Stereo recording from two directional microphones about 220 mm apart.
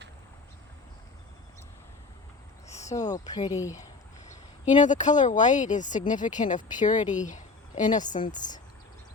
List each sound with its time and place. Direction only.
2.9 s speech: 15° left (ahead or behind)
4.6 s a woman's voice: 35° left (ahead or behind)